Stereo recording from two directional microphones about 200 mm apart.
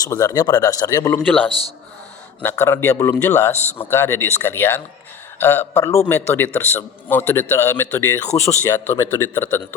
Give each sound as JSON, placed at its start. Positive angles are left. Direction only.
{"t": 0.0, "sound": "a man's voice", "side_deg": 15}
{"t": 1.5, "sound": "a man's voice", "side_deg": 30}
{"t": 2.4, "sound": "a man's voice", "side_deg": 10}